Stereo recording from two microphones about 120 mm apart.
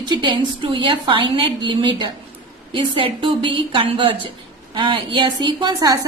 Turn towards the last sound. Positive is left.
turn(degrees=-35)  # may be behind; listen again after turning